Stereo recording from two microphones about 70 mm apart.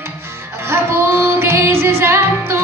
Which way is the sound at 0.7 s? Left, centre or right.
Right.